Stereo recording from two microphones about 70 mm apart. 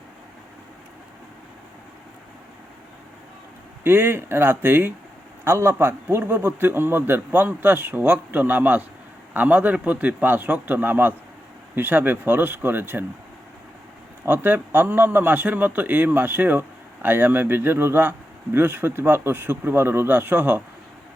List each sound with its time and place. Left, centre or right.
3.8 s a man's voice: right
14.3 s a man's voice: right